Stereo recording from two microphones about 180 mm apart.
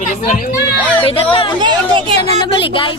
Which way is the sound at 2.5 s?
30° left (ahead or behind).